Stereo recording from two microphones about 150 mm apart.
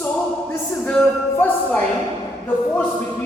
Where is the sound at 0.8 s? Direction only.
5° left (ahead or behind).